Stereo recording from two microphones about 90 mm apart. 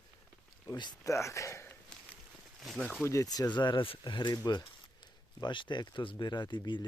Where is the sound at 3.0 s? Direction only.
40° left (ahead or behind); by 4.3 s 65° left (ahead or behind).